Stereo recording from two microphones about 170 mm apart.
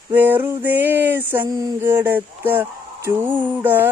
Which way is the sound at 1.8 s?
10° right (ahead or behind).